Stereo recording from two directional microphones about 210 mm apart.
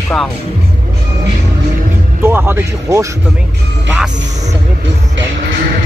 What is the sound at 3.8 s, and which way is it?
Music, 5° right (ahead or behind).